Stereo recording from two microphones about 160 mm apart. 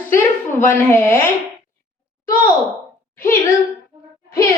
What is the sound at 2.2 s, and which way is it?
Speech, 15° left (ahead or behind).